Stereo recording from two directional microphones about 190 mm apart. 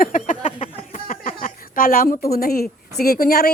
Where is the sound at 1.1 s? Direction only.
45° left (ahead or behind).